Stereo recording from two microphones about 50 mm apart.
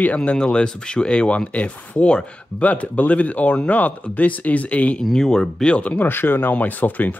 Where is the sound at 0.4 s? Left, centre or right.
Centre.